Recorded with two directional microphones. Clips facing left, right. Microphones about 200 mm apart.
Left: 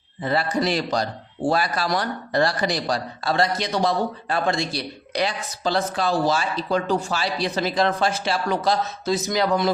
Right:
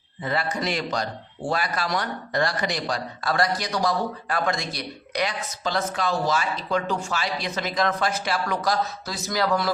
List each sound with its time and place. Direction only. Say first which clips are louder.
0.2 s speech: left 4 dB; 35° left (ahead or behind)